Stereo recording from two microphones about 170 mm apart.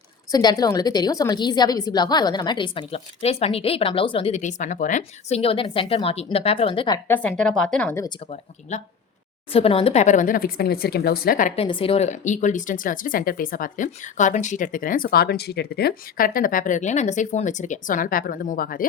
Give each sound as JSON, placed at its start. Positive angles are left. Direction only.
{"t": 0.3, "sound": "a woman's voice", "side_deg": 20}
{"t": 7.1, "sound": "speech", "side_deg": 10}
{"t": 8.7, "sound": "speech", "side_deg": 45}
{"t": 11.5, "sound": "speech", "side_deg": 30}